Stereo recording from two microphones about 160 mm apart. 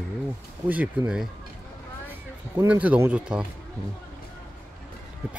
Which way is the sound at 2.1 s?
10° right (ahead or behind).